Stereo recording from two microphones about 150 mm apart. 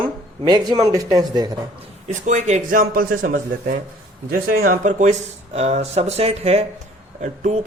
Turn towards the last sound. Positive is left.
turn(degrees=-50)  # may be behind; listen again after turning